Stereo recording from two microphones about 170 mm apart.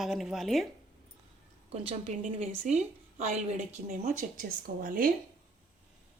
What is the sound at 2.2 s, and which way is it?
Speech, 40° right (ahead or behind).